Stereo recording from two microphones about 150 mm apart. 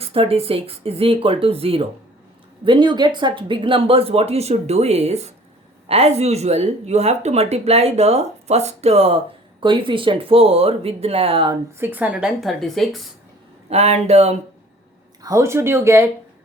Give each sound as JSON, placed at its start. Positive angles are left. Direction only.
{"t": 0.0, "sound": "speech", "side_deg": -40}
{"t": 11.8, "sound": "a woman's voice", "side_deg": -10}
{"t": 13.7, "sound": "speech", "side_deg": -45}
{"t": 15.2, "sound": "speech", "side_deg": -20}